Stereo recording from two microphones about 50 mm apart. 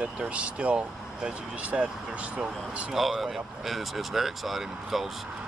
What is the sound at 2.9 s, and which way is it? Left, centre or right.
Speech, centre.